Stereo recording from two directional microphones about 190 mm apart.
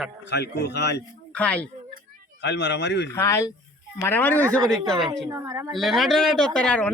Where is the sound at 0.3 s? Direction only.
60° left (ahead or behind).